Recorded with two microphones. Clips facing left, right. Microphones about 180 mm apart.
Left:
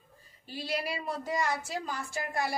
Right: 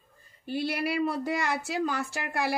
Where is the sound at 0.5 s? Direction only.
60° right (ahead or behind).